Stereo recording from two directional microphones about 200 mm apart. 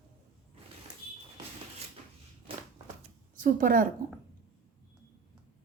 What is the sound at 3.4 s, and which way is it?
Speech, 45° right (ahead or behind).